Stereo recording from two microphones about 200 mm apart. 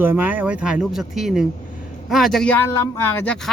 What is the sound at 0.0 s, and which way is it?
Speech, 10° right (ahead or behind).